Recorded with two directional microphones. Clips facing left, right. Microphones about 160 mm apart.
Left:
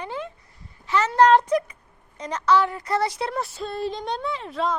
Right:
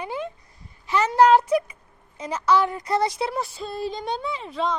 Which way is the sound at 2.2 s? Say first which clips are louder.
Even; 5° right (ahead or behind).